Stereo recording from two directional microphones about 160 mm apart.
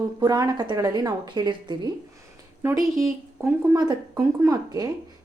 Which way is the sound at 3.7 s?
20° right (ahead or behind).